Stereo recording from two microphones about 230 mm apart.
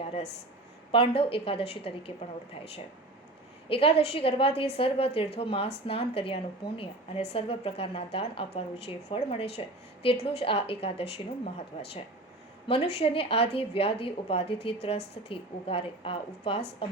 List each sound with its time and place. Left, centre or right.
0.0 s a sound: left
0.9 s speech: left
3.7 s speech: left
12.6 s speech: left